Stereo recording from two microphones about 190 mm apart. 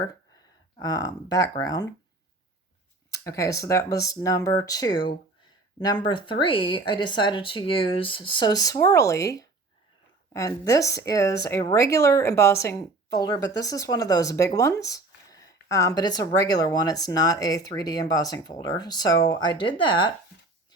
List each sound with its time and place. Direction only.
0.8 s speech: 20° left (ahead or behind)
3.1 s speech: 15° left (ahead or behind)